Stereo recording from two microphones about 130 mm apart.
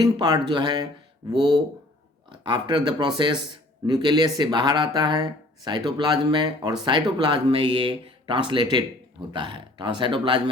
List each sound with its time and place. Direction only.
0.0 s speech: 35° right (ahead or behind)